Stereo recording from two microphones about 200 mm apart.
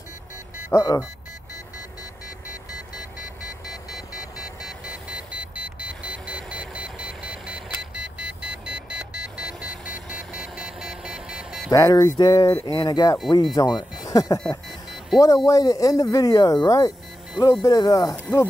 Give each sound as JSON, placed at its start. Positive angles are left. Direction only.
{"t": 0.7, "sound": "speech", "side_deg": 15}
{"t": 4.1, "sound": "vehicle", "side_deg": 0}
{"t": 11.7, "sound": "speech", "side_deg": 20}